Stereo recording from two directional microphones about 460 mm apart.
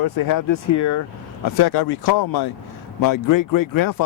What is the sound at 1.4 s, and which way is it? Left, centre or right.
A man's voice, left.